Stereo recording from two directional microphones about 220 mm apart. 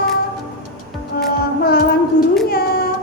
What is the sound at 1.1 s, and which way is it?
Music, 45° left (ahead or behind).